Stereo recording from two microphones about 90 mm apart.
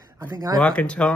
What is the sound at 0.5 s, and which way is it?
Speech, 10° left (ahead or behind).